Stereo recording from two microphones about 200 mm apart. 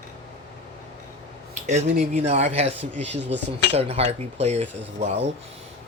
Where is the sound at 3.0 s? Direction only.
60° right (ahead or behind).